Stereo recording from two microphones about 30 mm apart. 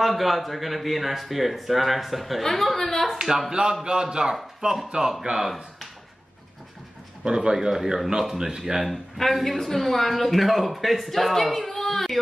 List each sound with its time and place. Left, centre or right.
0.0 s a woman's voice: centre
3.2 s speech: centre
3.8 s a man's voice: right
4.6 s speech: right
7.2 s a man's voice: right
7.7 s speech: centre
8.8 s speech: centre